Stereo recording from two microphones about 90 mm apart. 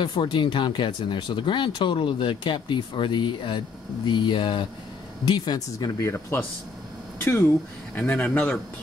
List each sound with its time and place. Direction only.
0.0 s speech: 60° left (ahead or behind)
5.2 s speech: 55° left (ahead or behind)
6.0 s speech: 30° left (ahead or behind)
8.1 s speech: 15° left (ahead or behind)